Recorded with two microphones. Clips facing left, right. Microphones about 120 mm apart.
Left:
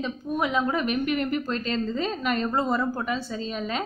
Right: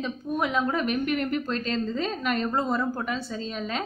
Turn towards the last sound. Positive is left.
turn(degrees=5)  # may be behind; listen again after turning